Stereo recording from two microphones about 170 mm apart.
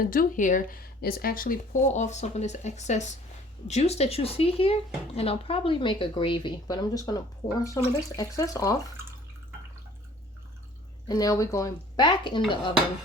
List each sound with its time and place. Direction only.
0.0 s speech: 55° left (ahead or behind); by 8.8 s 20° left (ahead or behind)
11.1 s speech: 20° left (ahead or behind)